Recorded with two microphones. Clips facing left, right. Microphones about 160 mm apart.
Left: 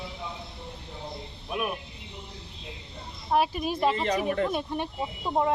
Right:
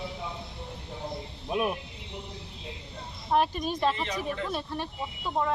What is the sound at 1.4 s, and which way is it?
Speech, 25° right (ahead or behind).